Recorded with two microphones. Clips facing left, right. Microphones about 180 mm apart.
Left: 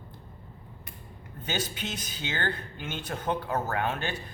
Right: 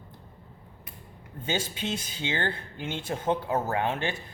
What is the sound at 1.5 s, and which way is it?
A man's voice, 25° right (ahead or behind).